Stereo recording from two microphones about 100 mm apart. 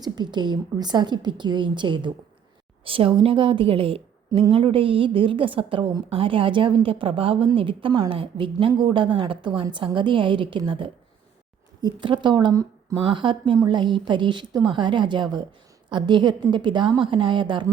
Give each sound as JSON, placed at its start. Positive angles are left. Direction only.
{"t": 0.0, "sound": "a woman's voice", "side_deg": -45}
{"t": 2.8, "sound": "a woman's voice", "side_deg": -65}